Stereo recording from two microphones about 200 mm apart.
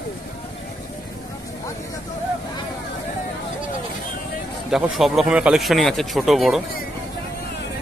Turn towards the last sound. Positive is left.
turn(degrees=0)  # may be behind; listen again after turning